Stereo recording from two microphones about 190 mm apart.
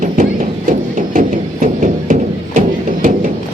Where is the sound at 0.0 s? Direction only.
45° right (ahead or behind).